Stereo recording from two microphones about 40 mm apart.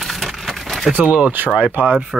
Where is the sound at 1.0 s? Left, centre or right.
Right.